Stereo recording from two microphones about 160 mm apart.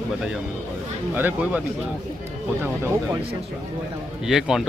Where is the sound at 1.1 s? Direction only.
10° right (ahead or behind).